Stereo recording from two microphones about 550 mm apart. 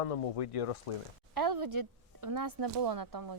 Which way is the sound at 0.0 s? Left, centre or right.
Left.